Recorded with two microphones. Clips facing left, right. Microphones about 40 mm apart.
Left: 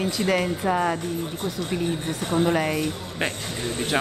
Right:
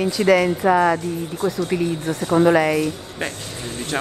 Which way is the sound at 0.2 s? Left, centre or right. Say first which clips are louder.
Right 8 dB; right.